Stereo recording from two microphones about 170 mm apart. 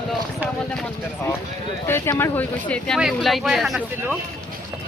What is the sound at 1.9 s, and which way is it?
Speech, 15° left (ahead or behind).